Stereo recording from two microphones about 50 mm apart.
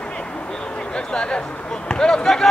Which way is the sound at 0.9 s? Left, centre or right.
Centre.